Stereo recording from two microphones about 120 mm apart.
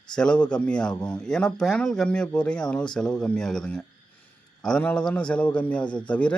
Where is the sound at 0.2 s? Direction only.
10° left (ahead or behind).